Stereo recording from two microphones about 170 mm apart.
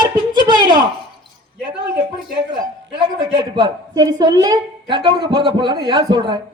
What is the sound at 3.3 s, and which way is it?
A woman's voice, 25° right (ahead or behind).